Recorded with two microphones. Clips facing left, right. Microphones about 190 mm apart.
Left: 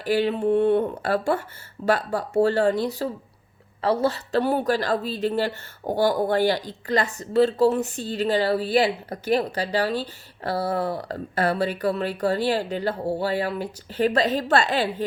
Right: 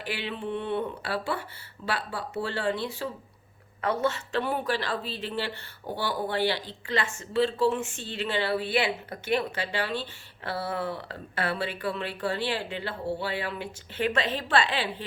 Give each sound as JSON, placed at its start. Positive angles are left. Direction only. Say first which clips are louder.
{"t": 0.0, "sound": "speech", "louder": "left 12 dB", "side_deg": 40}